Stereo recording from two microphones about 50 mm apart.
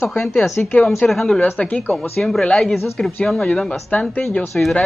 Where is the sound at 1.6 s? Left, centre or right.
Left.